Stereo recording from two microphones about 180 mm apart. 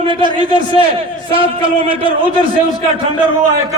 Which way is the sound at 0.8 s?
30° right (ahead or behind).